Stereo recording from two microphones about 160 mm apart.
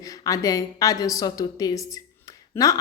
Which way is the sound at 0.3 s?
20° left (ahead or behind).